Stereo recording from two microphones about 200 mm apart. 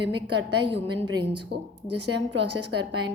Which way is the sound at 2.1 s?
60° right (ahead or behind).